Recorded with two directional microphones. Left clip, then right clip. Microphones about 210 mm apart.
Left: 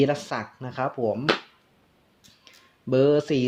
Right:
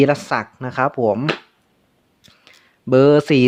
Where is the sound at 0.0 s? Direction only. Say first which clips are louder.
Right 8 dB; 35° right (ahead or behind).